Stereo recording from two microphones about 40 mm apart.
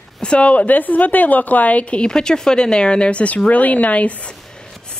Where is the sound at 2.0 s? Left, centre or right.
Centre; by 4.1 s left.